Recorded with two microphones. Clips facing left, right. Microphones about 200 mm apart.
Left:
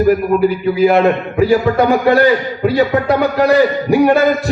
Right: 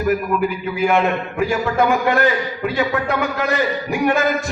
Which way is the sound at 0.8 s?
35° left (ahead or behind).